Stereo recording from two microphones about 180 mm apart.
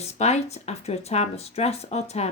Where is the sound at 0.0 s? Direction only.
40° left (ahead or behind).